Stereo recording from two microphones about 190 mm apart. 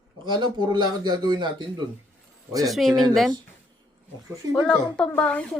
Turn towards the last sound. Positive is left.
turn(degrees=5)  # may be behind; listen again after turning